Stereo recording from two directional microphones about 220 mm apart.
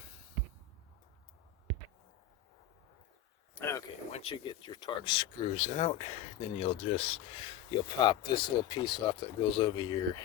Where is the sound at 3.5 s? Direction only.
10° left (ahead or behind).